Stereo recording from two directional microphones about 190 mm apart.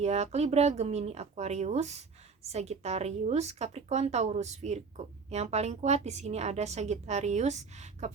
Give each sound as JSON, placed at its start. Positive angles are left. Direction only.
{"t": 0.0, "sound": "speech", "side_deg": -35}